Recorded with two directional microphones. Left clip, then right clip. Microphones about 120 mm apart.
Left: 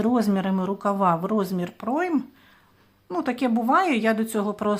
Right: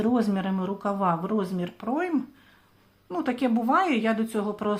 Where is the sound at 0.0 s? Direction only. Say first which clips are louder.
Left 2 dB; 35° left (ahead or behind).